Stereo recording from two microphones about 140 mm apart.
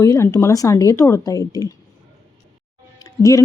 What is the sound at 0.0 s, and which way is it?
Speech, 20° left (ahead or behind).